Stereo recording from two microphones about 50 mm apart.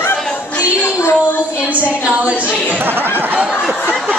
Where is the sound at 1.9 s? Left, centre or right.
Right.